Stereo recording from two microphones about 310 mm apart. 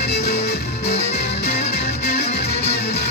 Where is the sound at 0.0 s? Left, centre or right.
Left.